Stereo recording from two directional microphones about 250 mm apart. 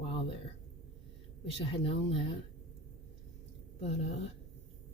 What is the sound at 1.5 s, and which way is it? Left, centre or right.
Speech, left.